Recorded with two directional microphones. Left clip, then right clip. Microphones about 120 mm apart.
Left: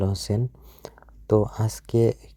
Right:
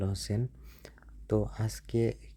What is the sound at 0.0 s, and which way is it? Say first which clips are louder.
Speech: left 9 dB; 40° left (ahead or behind).